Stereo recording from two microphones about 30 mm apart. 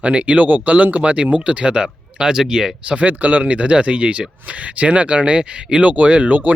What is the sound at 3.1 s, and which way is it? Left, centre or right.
Speech, right.